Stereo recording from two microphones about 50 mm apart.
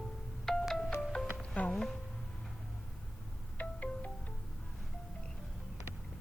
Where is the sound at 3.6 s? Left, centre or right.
Left.